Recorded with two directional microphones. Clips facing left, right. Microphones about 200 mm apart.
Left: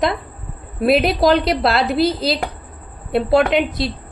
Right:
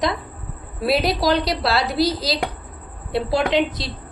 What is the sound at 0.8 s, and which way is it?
A woman's voice, 55° left (ahead or behind).